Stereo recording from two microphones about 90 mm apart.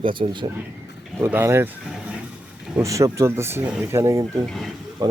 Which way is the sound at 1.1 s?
25° right (ahead or behind).